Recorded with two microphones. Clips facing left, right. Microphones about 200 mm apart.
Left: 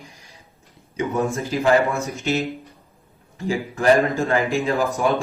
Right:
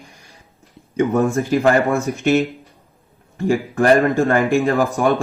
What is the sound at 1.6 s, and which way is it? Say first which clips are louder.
Speech: even; 60° right (ahead or behind).